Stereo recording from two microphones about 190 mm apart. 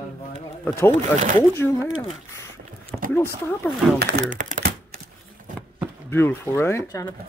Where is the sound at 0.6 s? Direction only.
10° left (ahead or behind).